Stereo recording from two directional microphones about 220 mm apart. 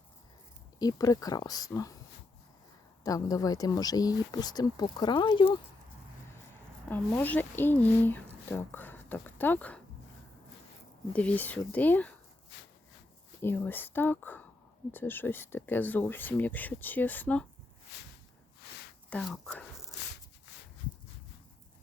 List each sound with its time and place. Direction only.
0.8 s speech: 15° left (ahead or behind)
3.0 s speech: 15° left (ahead or behind)
6.9 s speech: 10° left (ahead or behind)
11.1 s speech: 5° left (ahead or behind)
13.4 s speech: 10° left (ahead or behind)
19.1 s whispering: centre (ahead or behind)